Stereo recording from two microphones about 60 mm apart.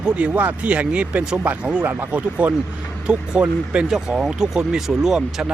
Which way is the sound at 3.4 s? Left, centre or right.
Centre.